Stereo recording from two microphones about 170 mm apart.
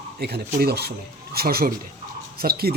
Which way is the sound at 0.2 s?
70° right (ahead or behind).